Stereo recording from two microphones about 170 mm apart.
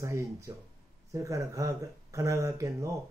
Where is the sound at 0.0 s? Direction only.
15° right (ahead or behind).